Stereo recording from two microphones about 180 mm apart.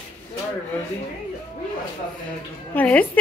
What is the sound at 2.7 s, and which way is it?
Speech, 10° left (ahead or behind).